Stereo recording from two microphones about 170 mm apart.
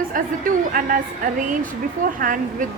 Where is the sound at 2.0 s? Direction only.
50° right (ahead or behind).